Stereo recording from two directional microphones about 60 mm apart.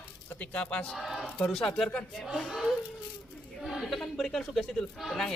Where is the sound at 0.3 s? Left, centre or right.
Centre.